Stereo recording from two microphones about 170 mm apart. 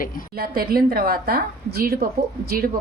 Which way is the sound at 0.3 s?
60° right (ahead or behind).